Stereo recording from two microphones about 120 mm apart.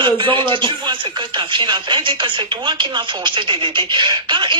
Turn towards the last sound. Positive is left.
turn(degrees=-40)  # may be behind; listen again after turning